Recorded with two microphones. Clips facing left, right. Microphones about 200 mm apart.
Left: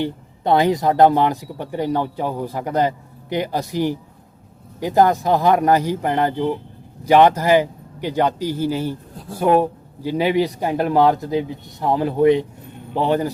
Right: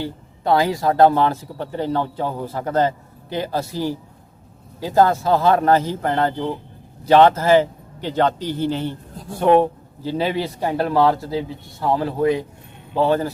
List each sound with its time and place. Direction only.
0.0 s a man's voice: 20° left (ahead or behind)